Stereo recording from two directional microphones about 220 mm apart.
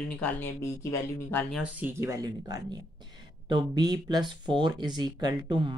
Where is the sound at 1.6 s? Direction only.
10° right (ahead or behind).